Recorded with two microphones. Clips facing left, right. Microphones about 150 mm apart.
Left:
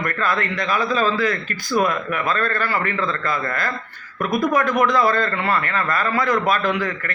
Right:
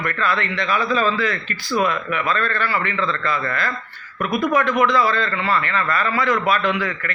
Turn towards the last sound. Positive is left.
turn(degrees=40)  # may be behind; listen again after turning